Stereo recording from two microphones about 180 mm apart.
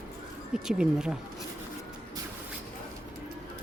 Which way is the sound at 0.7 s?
5° right (ahead or behind).